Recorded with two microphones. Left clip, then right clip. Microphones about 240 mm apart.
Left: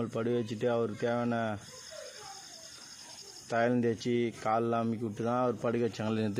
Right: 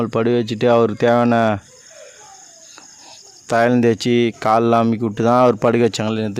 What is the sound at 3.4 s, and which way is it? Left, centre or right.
Speech, right.